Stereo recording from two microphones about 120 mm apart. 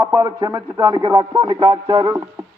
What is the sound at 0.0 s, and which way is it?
A man's voice, 20° right (ahead or behind).